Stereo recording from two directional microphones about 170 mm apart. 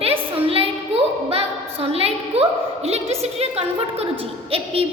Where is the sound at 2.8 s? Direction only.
35° right (ahead or behind).